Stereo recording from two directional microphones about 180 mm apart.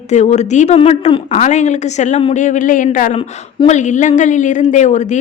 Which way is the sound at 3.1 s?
35° left (ahead or behind).